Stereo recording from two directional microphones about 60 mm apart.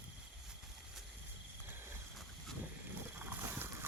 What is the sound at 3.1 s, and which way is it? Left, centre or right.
Wild animals, right.